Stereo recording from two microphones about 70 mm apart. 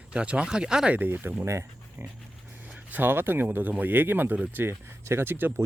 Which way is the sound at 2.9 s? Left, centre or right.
Right.